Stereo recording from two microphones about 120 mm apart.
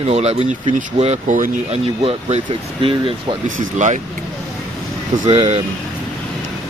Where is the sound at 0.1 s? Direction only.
60° right (ahead or behind).